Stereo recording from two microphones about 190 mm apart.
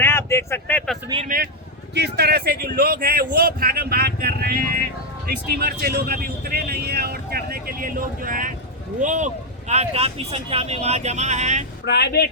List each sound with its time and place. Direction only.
0.0 s speech: 15° left (ahead or behind)
1.0 s speech: 25° right (ahead or behind)
2.0 s speech: 55° right (ahead or behind); by 11.6 s 35° right (ahead or behind)
11.9 s speech: 60° left (ahead or behind)